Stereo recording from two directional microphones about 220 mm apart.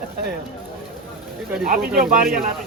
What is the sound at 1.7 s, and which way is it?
Speech, 40° right (ahead or behind).